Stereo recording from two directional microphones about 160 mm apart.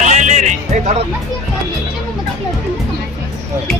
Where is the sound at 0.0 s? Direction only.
50° right (ahead or behind).